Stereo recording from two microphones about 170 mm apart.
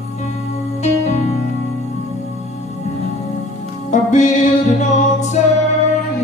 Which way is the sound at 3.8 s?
45° left (ahead or behind).